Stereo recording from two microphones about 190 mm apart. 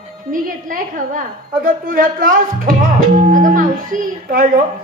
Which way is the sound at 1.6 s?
45° right (ahead or behind).